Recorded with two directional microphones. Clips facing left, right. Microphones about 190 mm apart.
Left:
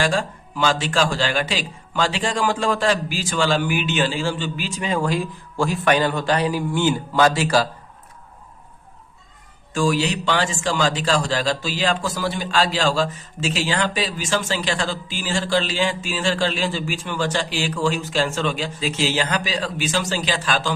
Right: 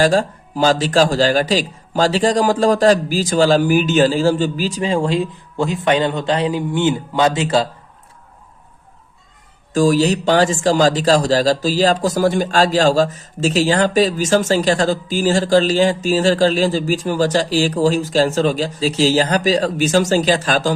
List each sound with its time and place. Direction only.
0.0 s a man's voice: 40° right (ahead or behind); by 7.7 s 25° right (ahead or behind)
9.7 s a man's voice: 40° right (ahead or behind)